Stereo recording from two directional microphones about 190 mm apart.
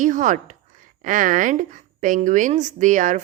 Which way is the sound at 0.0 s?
40° right (ahead or behind).